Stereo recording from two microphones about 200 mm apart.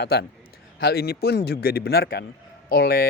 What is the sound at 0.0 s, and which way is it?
A man's voice, 50° left (ahead or behind).